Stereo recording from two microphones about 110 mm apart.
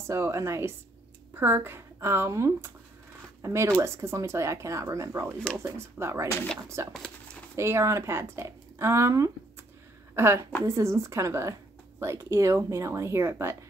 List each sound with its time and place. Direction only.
0.0 s a woman's voice: 25° right (ahead or behind)